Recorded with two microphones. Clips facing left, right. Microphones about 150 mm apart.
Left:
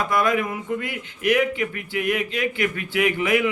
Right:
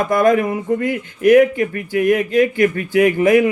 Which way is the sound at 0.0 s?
45° right (ahead or behind).